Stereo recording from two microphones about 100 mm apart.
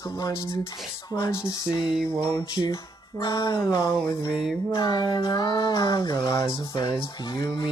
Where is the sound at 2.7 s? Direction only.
45° left (ahead or behind).